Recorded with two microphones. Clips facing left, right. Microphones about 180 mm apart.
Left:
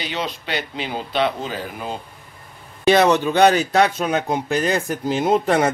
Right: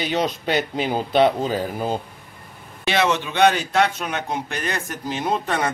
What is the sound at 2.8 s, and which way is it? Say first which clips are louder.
A man's voice: left 6 dB; 40° left (ahead or behind).